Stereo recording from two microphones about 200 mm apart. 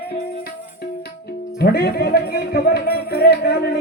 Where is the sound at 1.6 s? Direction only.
50° left (ahead or behind).